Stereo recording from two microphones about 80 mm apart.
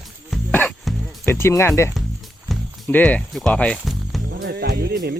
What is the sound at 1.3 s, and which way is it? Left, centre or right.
Speech, left.